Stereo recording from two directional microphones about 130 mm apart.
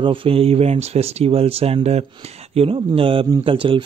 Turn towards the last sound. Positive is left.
turn(degrees=-40)  # may be behind; listen again after turning